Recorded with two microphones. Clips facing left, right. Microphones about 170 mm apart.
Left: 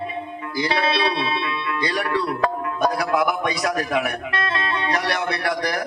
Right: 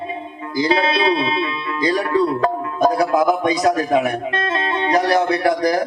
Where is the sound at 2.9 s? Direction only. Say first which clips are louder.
Right 5 dB; 35° right (ahead or behind).